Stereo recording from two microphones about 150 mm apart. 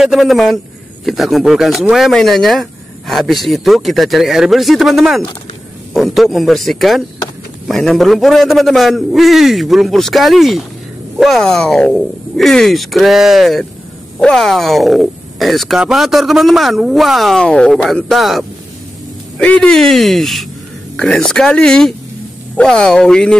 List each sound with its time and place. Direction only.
0.0 s speech: centre (ahead or behind)